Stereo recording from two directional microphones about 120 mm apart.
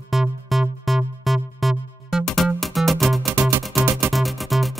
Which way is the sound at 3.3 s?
15° right (ahead or behind).